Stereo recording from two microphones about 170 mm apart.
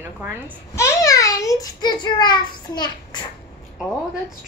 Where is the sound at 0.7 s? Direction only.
15° left (ahead or behind).